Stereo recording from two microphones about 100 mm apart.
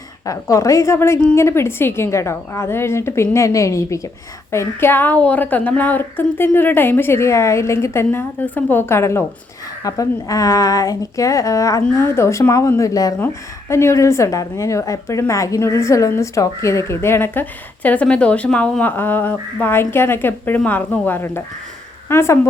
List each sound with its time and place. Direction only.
0.3 s a woman's voice: 35° left (ahead or behind)
13.1 s a woman's voice: 25° left (ahead or behind)